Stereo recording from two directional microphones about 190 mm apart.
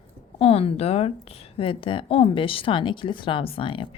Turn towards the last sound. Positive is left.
turn(degrees=25)  # may be behind; listen again after turning